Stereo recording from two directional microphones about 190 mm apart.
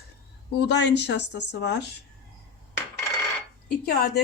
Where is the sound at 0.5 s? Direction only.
65° left (ahead or behind).